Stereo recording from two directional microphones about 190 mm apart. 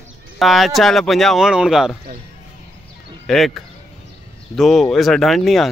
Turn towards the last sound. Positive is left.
turn(degrees=0)  # may be behind; listen again after turning